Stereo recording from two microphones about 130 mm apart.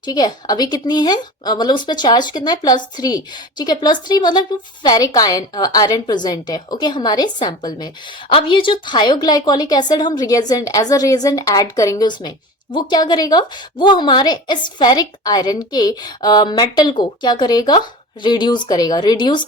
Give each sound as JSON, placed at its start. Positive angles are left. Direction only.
{"t": 0.0, "sound": "a woman's voice", "side_deg": 30}